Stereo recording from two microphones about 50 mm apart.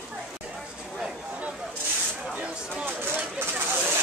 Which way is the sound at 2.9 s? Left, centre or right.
Right.